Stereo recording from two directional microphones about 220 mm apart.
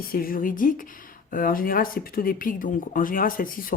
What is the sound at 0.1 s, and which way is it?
Speech, 40° left (ahead or behind).